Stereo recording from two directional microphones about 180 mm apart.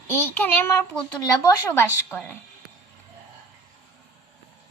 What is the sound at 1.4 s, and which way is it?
Speech, 20° left (ahead or behind).